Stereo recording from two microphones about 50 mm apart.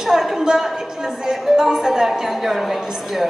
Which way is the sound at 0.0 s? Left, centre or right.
Centre.